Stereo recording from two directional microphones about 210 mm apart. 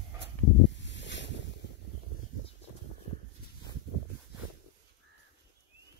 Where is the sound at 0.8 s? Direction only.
60° left (ahead or behind).